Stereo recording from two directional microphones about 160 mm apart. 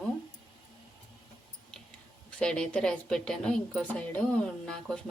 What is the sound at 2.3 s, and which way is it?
Speech, 5° left (ahead or behind).